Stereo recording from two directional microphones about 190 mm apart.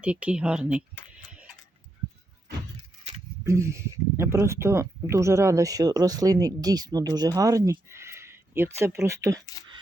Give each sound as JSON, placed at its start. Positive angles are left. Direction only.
{"t": 0.0, "sound": "speech", "side_deg": -5}
{"t": 1.3, "sound": "a sound", "side_deg": -5}
{"t": 3.4, "sound": "speech", "side_deg": -15}